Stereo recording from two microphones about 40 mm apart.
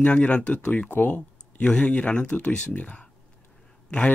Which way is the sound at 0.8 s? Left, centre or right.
Left.